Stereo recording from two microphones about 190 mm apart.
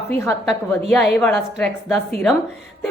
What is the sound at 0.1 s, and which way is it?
A woman's voice, 10° left (ahead or behind).